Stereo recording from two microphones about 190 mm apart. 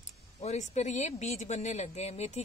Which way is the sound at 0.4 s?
35° left (ahead or behind).